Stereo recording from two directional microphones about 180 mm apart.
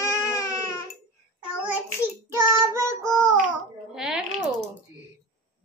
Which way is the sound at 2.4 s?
15° right (ahead or behind).